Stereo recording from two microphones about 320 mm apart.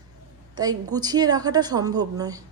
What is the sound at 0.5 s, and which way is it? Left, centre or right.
A woman's voice, centre.